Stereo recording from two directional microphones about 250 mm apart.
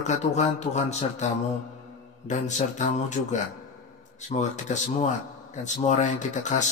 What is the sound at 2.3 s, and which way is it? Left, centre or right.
Speech, left.